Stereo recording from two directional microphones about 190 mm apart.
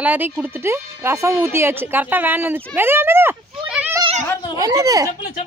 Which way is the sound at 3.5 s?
5° right (ahead or behind).